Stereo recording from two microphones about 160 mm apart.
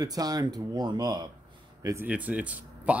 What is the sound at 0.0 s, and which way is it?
Speech, 25° right (ahead or behind).